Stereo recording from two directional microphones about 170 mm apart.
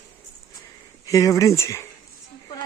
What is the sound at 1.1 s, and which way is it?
Speech, 20° left (ahead or behind).